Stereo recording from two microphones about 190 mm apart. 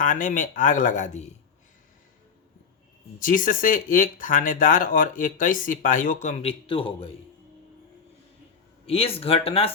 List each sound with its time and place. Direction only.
0.0 s speech: 45° left (ahead or behind)
3.2 s speech: 45° left (ahead or behind); by 7.1 s 30° left (ahead or behind)
8.9 s speech: 30° left (ahead or behind)